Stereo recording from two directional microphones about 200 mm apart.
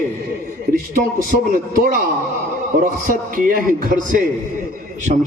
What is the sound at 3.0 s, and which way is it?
Speech, 45° right (ahead or behind).